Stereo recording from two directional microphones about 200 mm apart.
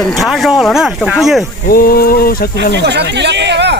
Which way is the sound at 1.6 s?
45° left (ahead or behind).